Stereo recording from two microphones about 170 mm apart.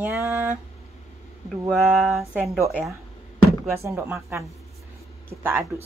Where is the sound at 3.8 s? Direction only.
15° right (ahead or behind).